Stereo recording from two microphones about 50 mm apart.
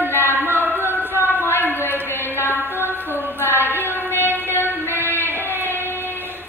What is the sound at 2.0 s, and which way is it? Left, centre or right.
Music, left.